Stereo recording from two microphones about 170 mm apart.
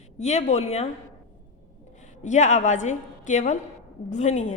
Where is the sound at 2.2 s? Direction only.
45° left (ahead or behind).